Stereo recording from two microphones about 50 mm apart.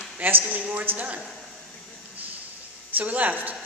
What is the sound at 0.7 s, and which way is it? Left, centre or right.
Speech, right.